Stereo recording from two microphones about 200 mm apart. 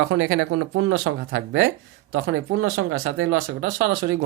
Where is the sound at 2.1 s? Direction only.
80° right.